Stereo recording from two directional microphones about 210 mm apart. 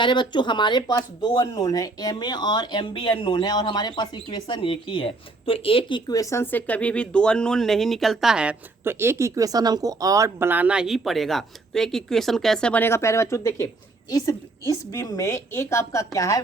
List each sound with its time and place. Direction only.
0.0 s speech: 20° left (ahead or behind)